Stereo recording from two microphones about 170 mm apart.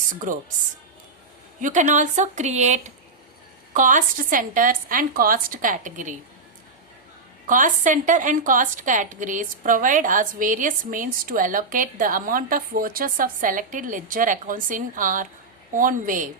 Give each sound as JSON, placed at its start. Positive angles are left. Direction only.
{"t": 0.2, "sound": "a woman's voice", "side_deg": -50}
{"t": 1.6, "sound": "a woman's voice", "side_deg": -45}
{"t": 7.4, "sound": "a woman's voice", "side_deg": -50}